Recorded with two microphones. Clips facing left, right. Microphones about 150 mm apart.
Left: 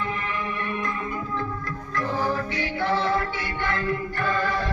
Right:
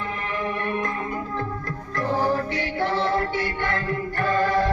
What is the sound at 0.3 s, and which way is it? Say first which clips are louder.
Music: right 3 dB; 40° right (ahead or behind).